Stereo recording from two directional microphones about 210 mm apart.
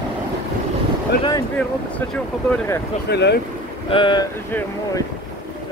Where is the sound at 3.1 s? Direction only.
50° left (ahead or behind).